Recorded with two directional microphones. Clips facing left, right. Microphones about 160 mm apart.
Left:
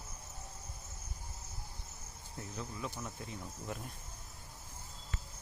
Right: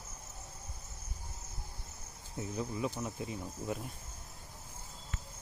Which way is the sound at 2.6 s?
20° right (ahead or behind).